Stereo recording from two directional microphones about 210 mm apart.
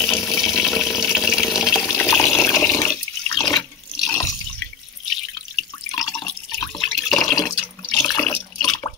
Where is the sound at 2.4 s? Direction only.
10° left (ahead or behind).